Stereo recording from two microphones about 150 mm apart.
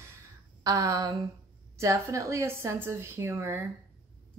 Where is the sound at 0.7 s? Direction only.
25° right (ahead or behind).